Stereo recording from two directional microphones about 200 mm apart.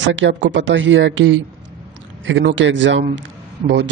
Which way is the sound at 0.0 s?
65° right (ahead or behind).